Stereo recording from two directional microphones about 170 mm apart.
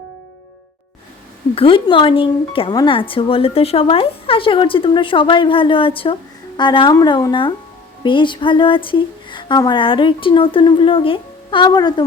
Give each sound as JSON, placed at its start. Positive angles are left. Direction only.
{"t": 1.5, "sound": "speech", "side_deg": 30}